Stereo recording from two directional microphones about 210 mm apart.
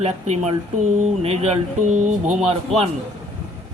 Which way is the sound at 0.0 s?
30° right (ahead or behind).